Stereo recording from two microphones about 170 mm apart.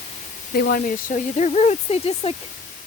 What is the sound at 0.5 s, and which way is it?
Speech, 60° left (ahead or behind).